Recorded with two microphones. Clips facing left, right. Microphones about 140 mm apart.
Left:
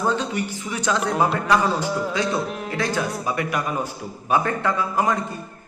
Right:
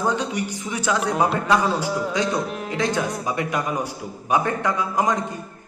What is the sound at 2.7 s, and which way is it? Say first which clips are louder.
Speech: right 2 dB; 20° right (ahead or behind).